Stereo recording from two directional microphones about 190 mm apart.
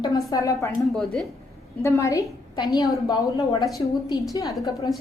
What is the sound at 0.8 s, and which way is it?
Speech, centre (ahead or behind).